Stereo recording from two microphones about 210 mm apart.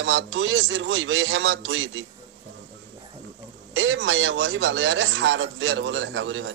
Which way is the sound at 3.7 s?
60° right (ahead or behind).